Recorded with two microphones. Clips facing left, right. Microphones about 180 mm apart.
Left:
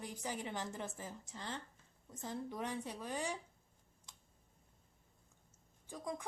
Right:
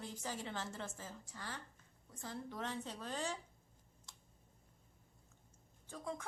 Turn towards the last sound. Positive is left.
turn(degrees=15)  # may be behind; listen again after turning